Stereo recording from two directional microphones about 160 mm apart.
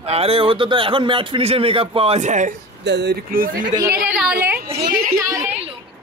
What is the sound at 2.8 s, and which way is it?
Speech, 90° right.